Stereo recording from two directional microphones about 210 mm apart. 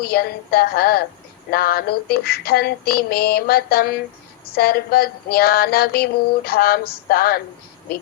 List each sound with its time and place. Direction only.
0.0 s female singing: 45° left (ahead or behind)